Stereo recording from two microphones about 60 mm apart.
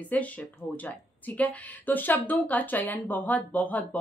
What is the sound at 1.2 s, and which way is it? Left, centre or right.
Speech, left.